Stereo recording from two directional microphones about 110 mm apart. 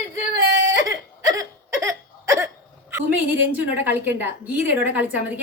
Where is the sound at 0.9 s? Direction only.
30° right (ahead or behind).